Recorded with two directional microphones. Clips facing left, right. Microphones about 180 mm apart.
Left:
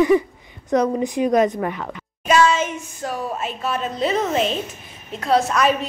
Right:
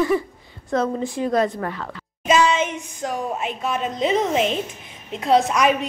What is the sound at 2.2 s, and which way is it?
A woman's voice, 20° right (ahead or behind).